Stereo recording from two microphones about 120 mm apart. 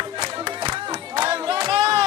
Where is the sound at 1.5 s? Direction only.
40° right (ahead or behind).